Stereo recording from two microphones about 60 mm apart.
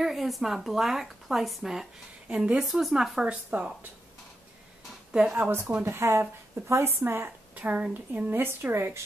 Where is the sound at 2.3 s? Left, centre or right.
Centre.